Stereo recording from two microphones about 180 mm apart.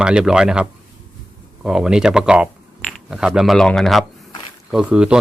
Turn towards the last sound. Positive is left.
turn(degrees=-5)  # may be behind; listen again after turning